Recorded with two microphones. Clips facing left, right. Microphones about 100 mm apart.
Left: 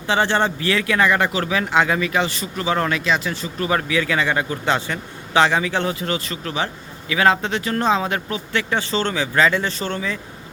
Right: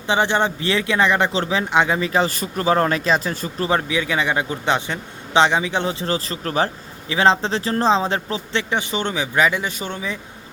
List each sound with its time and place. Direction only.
0.1 s speech: 15° right (ahead or behind); by 3.8 s 35° right (ahead or behind)
3.8 s speech: 15° right (ahead or behind); by 6.7 s 40° right (ahead or behind)
7.1 s speech: 30° right (ahead or behind)
8.7 s speech: 15° right (ahead or behind)